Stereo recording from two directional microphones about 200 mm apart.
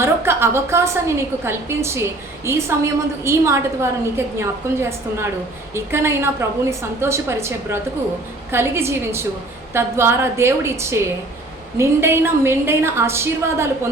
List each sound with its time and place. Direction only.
0.0 s a woman's voice: 10° right (ahead or behind)